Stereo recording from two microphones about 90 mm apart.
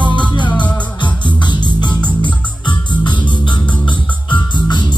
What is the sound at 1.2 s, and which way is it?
Music, 60° left (ahead or behind).